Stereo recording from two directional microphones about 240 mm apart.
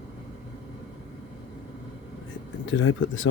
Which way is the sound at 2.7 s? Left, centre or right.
Left.